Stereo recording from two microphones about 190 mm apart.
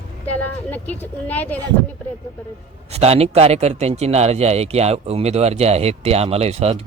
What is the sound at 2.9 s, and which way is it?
A man's voice, 35° right (ahead or behind).